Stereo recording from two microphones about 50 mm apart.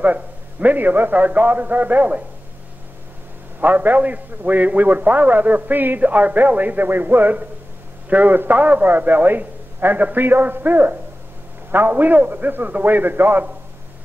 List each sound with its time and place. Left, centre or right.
0.0 s a man's voice: right
3.6 s a man's voice: right